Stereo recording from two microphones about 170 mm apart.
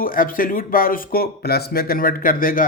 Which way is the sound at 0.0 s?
55° left (ahead or behind).